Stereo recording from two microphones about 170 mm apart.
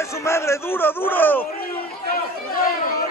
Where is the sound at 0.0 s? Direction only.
15° left (ahead or behind).